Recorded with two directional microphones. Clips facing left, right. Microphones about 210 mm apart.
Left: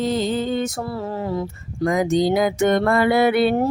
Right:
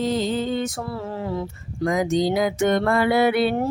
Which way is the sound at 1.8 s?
55° left (ahead or behind).